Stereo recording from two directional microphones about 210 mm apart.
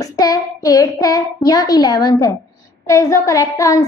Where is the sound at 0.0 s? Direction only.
15° left (ahead or behind).